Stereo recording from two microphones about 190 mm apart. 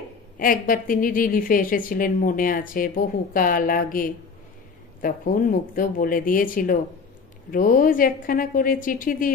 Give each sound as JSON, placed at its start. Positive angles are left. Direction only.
{"t": 0.4, "sound": "a woman's voice", "side_deg": 45}